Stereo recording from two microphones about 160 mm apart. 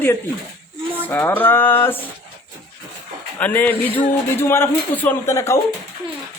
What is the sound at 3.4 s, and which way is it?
Speech, 10° left (ahead or behind).